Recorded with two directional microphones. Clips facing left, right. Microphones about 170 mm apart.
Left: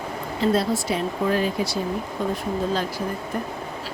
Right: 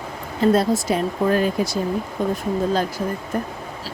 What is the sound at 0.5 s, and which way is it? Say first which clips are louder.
Speech: right 4 dB; 45° right (ahead or behind).